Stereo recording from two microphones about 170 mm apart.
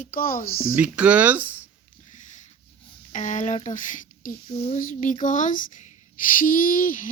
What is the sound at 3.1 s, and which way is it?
Speech, 45° left (ahead or behind).